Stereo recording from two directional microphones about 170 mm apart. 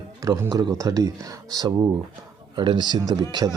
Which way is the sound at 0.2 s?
20° right (ahead or behind).